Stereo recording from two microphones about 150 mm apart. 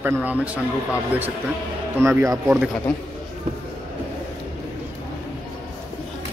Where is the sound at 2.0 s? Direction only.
15° right (ahead or behind).